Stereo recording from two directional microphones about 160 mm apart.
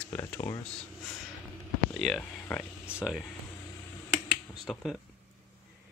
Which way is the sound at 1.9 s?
Centre (ahead or behind).